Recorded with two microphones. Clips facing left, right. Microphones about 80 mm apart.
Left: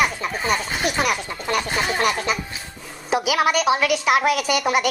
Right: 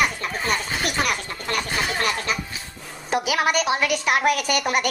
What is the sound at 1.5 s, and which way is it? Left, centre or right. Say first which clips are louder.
Speech: left 3 dB; centre.